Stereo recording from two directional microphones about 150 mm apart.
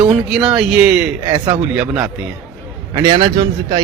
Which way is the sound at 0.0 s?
5° right (ahead or behind).